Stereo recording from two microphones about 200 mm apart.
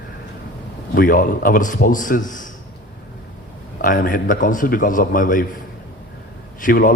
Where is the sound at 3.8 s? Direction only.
40° left (ahead or behind).